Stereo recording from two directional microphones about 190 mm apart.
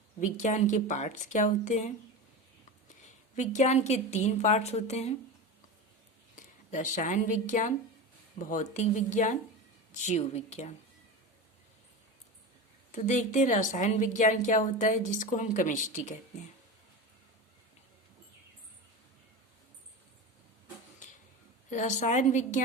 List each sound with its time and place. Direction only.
0.2 s a woman's voice: 40° left (ahead or behind)
3.3 s a woman's voice: 40° left (ahead or behind)
6.3 s a woman's voice: 40° left (ahead or behind)
12.9 s a woman's voice: 40° left (ahead or behind)
21.7 s a woman's voice: 40° left (ahead or behind)